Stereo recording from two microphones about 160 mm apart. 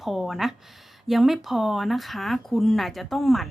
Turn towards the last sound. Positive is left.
turn(degrees=0)  # may be behind; listen again after turning